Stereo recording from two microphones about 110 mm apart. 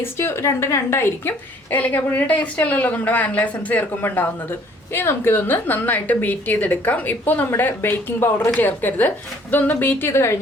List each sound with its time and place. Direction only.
0.0 s a woman's voice: 20° left (ahead or behind)